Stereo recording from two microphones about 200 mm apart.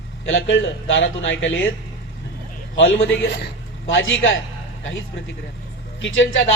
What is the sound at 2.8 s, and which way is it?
Speech, 70° left (ahead or behind).